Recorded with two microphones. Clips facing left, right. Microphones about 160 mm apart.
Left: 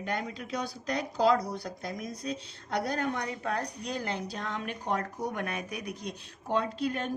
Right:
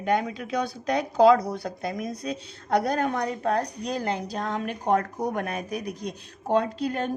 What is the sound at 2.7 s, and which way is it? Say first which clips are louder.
A woman's voice: right 7 dB; 50° right (ahead or behind).